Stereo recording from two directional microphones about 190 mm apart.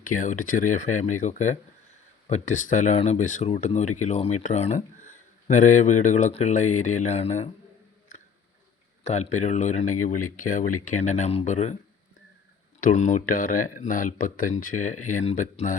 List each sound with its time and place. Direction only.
0.1 s speech: 45° left (ahead or behind)
9.0 s speech: 35° left (ahead or behind)
12.8 s speech: 40° left (ahead or behind)